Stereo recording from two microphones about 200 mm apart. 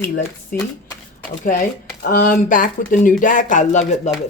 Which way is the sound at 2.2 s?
45° left (ahead or behind).